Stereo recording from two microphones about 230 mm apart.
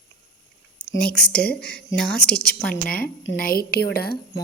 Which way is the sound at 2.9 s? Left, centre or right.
Left.